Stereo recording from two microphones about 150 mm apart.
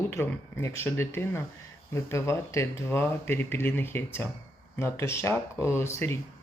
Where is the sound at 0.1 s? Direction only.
15° left (ahead or behind).